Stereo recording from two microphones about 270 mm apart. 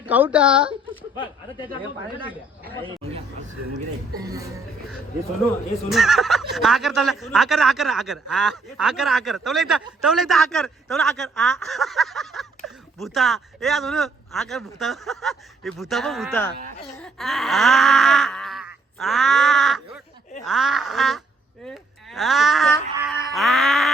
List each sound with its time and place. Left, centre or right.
0.0 s a man's voice: centre
1.1 s speech: centre
2.9 s speech: right
5.9 s a man's voice: centre